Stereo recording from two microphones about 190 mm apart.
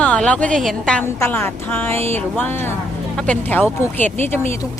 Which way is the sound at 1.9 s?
30° right (ahead or behind).